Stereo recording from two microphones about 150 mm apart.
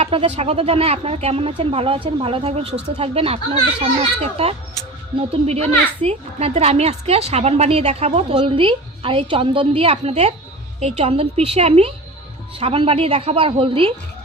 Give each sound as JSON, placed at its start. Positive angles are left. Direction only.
{"t": 0.0, "sound": "a child's voice", "side_deg": -45}